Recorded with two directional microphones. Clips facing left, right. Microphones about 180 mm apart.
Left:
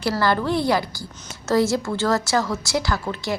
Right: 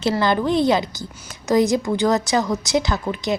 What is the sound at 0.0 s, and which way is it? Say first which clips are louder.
A woman's voice: right 2 dB; 20° right (ahead or behind).